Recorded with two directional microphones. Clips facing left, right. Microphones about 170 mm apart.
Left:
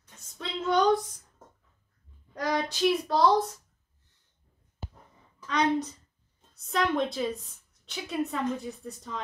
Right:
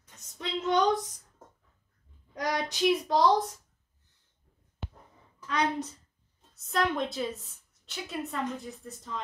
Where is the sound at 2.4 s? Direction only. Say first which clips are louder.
Left 2 dB; 15° right (ahead or behind).